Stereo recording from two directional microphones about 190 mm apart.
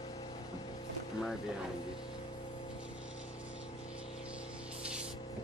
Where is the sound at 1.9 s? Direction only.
20° left (ahead or behind).